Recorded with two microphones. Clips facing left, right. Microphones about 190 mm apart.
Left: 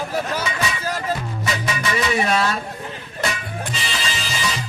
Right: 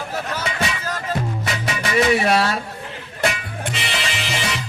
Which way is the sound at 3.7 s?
65° right (ahead or behind).